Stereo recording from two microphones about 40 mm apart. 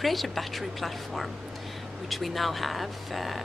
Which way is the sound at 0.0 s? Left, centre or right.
Centre.